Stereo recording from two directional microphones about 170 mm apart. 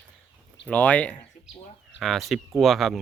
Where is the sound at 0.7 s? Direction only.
10° left (ahead or behind).